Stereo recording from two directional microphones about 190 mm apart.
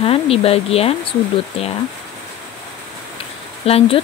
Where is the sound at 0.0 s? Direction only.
30° left (ahead or behind).